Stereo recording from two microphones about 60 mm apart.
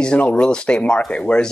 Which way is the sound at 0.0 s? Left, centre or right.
Centre.